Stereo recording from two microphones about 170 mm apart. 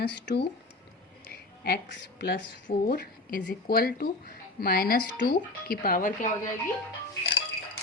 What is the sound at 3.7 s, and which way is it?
Speech, 60° left (ahead or behind).